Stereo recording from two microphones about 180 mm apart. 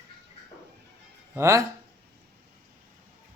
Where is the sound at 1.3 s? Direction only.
15° right (ahead or behind).